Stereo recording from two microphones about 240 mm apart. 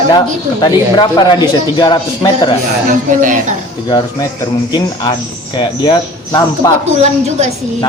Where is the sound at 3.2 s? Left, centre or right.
Right.